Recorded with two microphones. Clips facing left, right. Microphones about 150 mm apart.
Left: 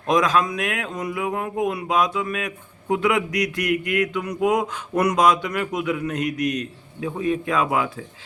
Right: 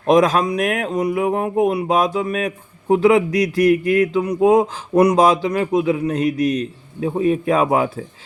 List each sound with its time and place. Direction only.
0.1 s speech: 35° right (ahead or behind)